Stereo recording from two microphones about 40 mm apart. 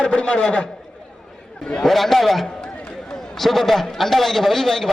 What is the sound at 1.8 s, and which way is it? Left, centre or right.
A man's voice, centre.